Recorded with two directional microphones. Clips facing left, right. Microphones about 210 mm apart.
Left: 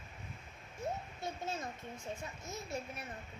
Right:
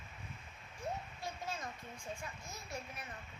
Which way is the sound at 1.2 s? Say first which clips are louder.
Left 5 dB; 25° left (ahead or behind).